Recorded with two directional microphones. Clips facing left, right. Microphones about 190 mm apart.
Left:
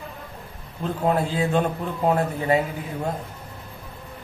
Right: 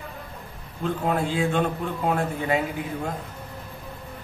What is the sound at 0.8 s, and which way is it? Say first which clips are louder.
A man's voice: left 2 dB; 40° left (ahead or behind).